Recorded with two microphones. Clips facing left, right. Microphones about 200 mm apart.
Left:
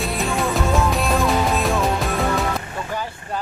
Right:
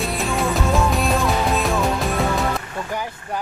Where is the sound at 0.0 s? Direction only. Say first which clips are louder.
Even; centre (ahead or behind).